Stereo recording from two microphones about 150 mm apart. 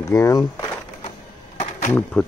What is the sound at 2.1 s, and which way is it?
Speech, 5° left (ahead or behind).